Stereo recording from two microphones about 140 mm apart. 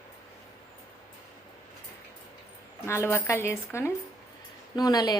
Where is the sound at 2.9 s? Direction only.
20° left (ahead or behind).